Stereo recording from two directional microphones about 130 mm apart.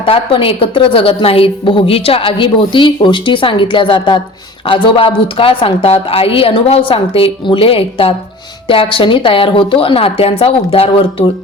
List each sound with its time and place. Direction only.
0.0 s a woman's voice: 45° left (ahead or behind)